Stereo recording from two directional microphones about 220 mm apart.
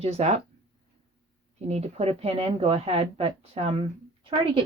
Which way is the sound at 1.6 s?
30° right (ahead or behind).